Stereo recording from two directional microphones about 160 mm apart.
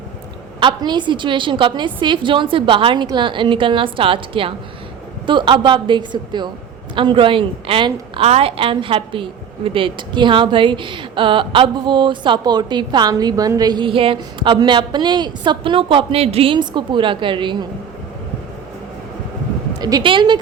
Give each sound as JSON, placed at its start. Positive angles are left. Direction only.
{"t": 0.6, "sound": "a woman's voice", "side_deg": -30}
{"t": 19.8, "sound": "a woman's voice", "side_deg": -30}